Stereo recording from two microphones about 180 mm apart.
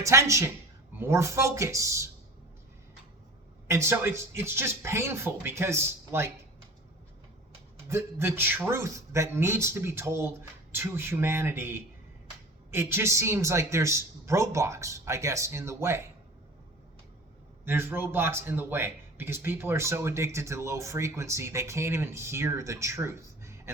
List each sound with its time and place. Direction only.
0.0 s speech: 15° right (ahead or behind)
3.7 s speech: 15° right (ahead or behind)
7.9 s speech: 15° right (ahead or behind)
17.7 s speech: 10° right (ahead or behind)